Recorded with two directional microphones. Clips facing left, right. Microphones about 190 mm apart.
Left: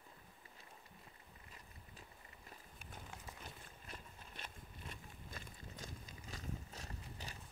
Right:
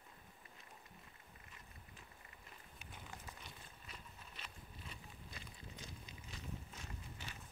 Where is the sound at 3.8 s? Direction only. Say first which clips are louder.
Left 3 dB; 50° left (ahead or behind).